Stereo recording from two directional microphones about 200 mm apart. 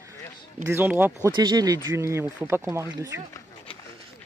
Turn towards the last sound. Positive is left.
turn(degrees=-15)  # may be behind; listen again after turning